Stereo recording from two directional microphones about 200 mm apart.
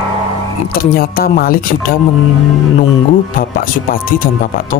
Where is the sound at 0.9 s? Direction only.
45° left (ahead or behind).